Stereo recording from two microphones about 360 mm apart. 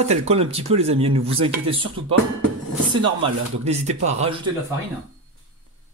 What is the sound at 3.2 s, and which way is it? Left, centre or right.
Speech, centre.